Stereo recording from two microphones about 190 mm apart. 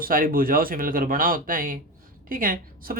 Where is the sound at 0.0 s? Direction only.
50° right (ahead or behind).